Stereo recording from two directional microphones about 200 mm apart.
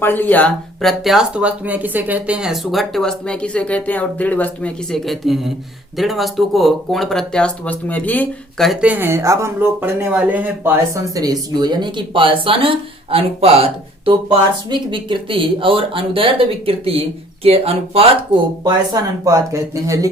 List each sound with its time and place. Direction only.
0.0 s speech: 10° left (ahead or behind); by 18.1 s 30° right (ahead or behind)
19.2 s speech: 15° right (ahead or behind)